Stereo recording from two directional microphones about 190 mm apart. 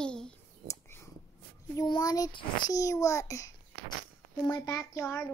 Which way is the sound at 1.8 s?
20° left (ahead or behind).